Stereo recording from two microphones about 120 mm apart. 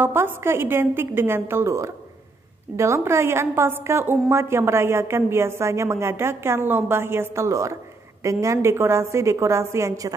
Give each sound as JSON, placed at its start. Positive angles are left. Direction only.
{"t": 0.0, "sound": "a woman's voice", "side_deg": -20}